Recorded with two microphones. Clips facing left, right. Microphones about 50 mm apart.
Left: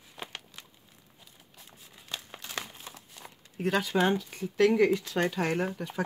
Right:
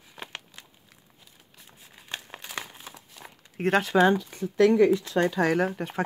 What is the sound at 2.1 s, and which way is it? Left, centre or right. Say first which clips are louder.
Crumpling: right 2 dB; right.